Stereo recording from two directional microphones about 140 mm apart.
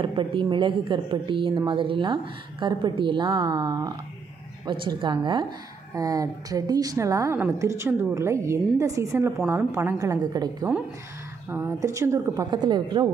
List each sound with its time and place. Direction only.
0.0 s a woman's voice: 35° right (ahead or behind)
11.4 s a woman's voice: 15° right (ahead or behind); by 13.1 s 35° right (ahead or behind)